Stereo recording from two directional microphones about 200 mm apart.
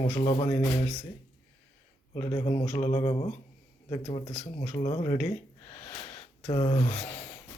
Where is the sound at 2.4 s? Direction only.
30° left (ahead or behind).